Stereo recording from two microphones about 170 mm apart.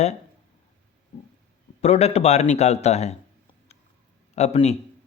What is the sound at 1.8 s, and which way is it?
Speech, 40° left (ahead or behind).